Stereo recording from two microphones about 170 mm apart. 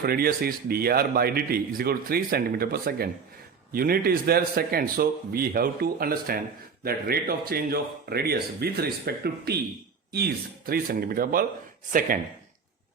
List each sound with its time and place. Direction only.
0.0 s a man's voice: 65° right (ahead or behind)
10.7 s a man's voice: 60° right (ahead or behind)